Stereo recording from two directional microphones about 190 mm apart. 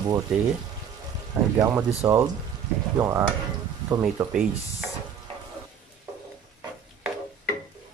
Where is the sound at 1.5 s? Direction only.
15° right (ahead or behind).